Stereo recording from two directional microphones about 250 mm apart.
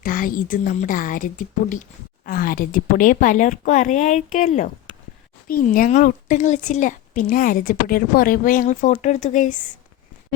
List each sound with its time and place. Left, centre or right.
0.0 s a woman's voice: left